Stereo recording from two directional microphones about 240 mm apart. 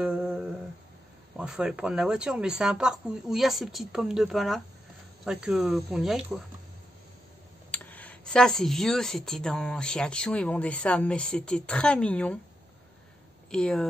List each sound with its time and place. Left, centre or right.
0.0 s humming: centre
1.4 s speech: centre
7.7 s speech: centre
13.5 s speech: centre